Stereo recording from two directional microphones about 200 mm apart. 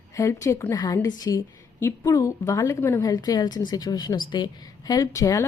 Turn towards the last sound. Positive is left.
turn(degrees=15)  # may be behind; listen again after turning